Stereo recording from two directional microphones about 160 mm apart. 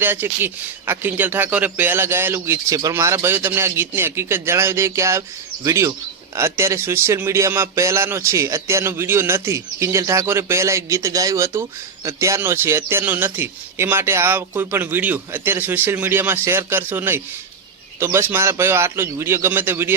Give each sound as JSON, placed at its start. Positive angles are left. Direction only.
{"t": 0.0, "sound": "speech", "side_deg": -15}